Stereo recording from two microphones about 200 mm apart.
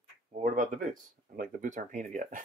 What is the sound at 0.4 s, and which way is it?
Speech, 40° right (ahead or behind).